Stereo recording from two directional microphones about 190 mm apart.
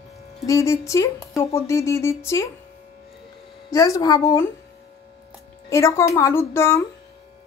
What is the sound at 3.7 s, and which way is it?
Speech, 15° left (ahead or behind).